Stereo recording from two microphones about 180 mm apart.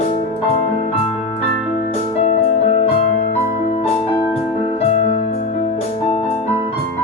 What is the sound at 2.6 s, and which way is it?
Music, 35° left (ahead or behind).